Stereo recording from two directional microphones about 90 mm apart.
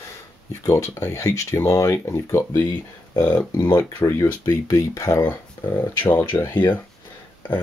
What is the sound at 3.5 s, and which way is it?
Speech, 45° left (ahead or behind).